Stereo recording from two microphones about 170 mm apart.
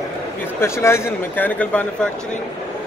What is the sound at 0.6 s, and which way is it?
Speech, 15° left (ahead or behind).